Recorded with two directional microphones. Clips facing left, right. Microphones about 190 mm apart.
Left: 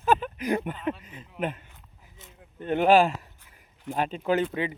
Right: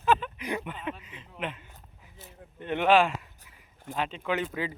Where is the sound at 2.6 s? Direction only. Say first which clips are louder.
Left 3 dB; 40° left (ahead or behind).